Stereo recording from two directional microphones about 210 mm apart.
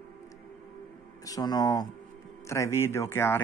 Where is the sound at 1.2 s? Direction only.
15° left (ahead or behind).